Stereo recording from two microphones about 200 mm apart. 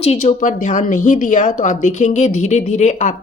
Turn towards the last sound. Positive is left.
turn(degrees=35)  # may be behind; listen again after turning